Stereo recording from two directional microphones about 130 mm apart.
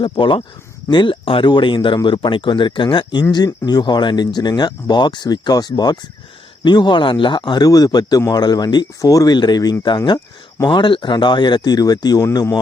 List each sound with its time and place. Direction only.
0.0 s speech: 40° left (ahead or behind)